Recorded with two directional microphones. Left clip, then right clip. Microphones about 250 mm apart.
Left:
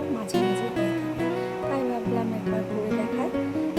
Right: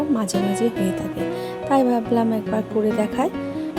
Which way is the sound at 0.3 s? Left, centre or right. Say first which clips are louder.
Left 1 dB; centre.